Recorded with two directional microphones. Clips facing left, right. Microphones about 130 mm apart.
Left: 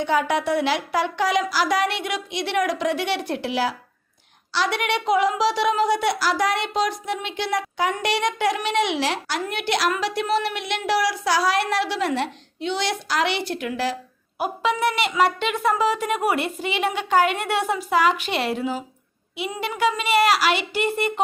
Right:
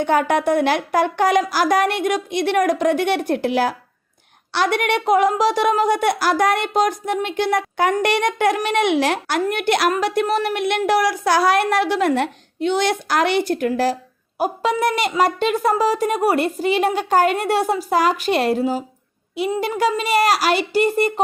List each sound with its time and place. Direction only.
0.0 s speech: 50° right (ahead or behind)